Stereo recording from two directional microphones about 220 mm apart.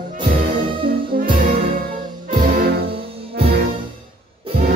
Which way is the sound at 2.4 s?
40° right (ahead or behind).